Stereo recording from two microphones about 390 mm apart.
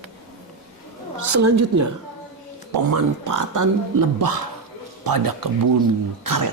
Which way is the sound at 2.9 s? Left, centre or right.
Right.